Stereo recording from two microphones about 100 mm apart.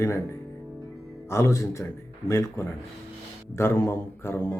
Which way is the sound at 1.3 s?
30° left (ahead or behind).